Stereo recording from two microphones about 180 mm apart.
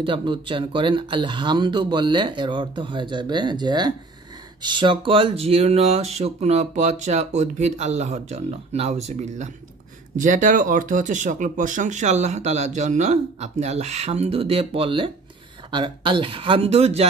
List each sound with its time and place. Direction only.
0.0 s speech: 25° right (ahead or behind)